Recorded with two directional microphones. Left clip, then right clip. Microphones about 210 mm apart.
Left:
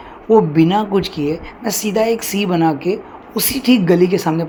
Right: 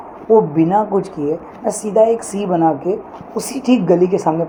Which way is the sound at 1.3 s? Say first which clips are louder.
Right 2 dB; 80° left.